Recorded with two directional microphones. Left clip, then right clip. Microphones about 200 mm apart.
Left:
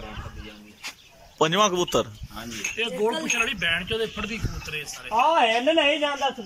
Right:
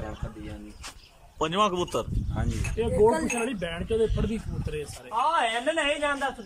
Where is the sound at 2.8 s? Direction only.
25° right (ahead or behind).